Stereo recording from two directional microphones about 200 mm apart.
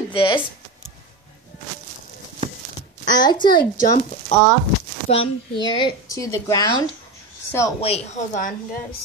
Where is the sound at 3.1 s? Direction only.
20° left (ahead or behind).